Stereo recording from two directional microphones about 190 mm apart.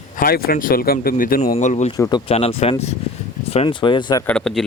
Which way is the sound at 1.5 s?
35° left (ahead or behind).